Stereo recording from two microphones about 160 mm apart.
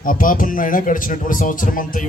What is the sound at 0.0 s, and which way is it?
A man's voice, 60° left (ahead or behind).